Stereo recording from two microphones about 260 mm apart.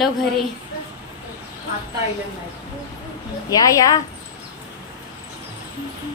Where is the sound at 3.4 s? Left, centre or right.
Centre.